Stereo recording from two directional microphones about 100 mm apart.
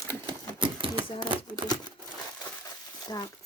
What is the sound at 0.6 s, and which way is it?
Typewriter, 55° right (ahead or behind).